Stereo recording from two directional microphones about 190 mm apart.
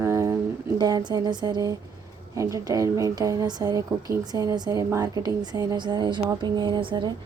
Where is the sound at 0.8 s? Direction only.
20° right (ahead or behind).